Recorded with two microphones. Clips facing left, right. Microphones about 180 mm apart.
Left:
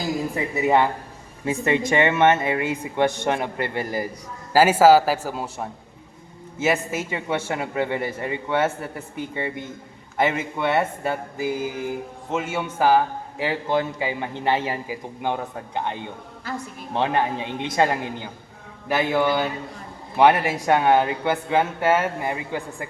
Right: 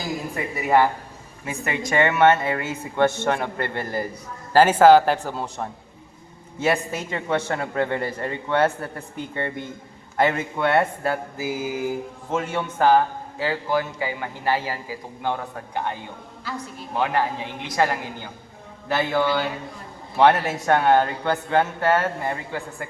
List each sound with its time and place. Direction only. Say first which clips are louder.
1.5 s a man's voice: left 6 dB; 25° left (ahead or behind); by 12.4 s 5° right (ahead or behind)
12.4 s a man's voice: right 1 dB; 5° left (ahead or behind)
13.4 s a man's voice: left 1 dB; 20° left (ahead or behind)